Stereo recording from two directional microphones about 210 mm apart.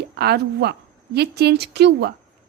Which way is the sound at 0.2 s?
50° right (ahead or behind).